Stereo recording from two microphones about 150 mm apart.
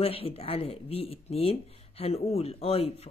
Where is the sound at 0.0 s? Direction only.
40° left (ahead or behind).